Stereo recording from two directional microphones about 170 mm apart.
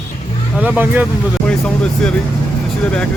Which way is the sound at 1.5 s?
5° left (ahead or behind).